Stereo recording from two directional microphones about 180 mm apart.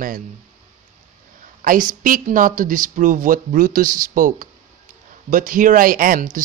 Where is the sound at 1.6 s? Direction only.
50° right (ahead or behind).